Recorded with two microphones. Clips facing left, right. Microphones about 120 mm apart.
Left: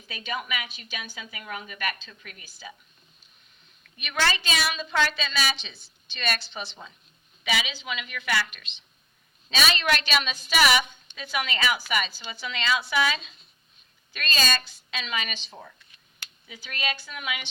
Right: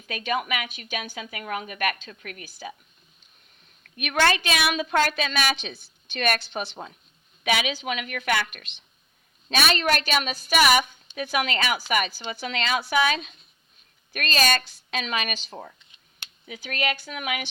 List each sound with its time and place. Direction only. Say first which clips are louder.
0.1 s a woman's voice: right 6 dB; 55° right (ahead or behind)
3.9 s a woman's voice: right 5 dB; 55° right (ahead or behind)
9.5 s a woman's voice: right 2 dB; 55° right (ahead or behind)
16.6 s speech: right 4 dB; 55° right (ahead or behind)